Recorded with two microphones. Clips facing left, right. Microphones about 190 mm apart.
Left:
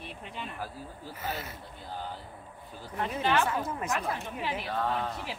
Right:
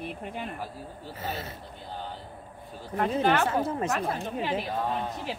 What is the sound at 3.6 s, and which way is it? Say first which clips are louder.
Speech: right 4 dB; 25° right (ahead or behind).